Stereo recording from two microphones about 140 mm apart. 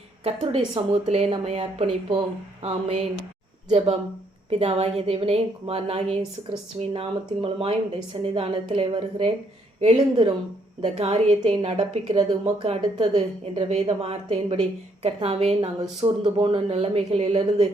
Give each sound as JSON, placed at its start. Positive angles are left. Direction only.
{"t": 0.3, "sound": "a woman's voice", "side_deg": -40}